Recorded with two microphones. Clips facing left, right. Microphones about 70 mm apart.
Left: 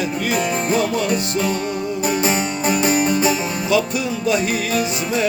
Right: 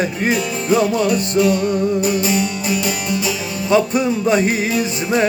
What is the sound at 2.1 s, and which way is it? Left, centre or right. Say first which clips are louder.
Music: right 1 dB; left.